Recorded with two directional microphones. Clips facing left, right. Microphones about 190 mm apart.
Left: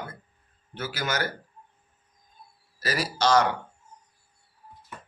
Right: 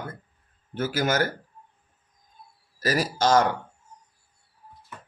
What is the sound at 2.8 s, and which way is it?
Speech, 45° right (ahead or behind).